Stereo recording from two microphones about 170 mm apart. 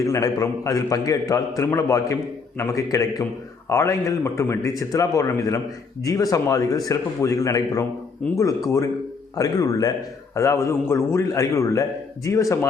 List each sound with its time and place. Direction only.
0.0 s a man's voice: 20° left (ahead or behind)